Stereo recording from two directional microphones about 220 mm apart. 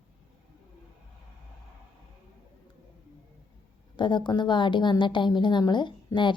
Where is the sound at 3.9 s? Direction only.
20° left (ahead or behind).